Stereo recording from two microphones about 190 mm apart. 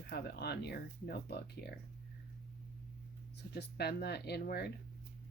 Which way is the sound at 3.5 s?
55° left (ahead or behind).